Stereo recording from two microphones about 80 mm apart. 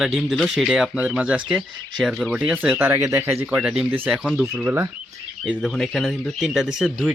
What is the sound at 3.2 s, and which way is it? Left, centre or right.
Speech, centre.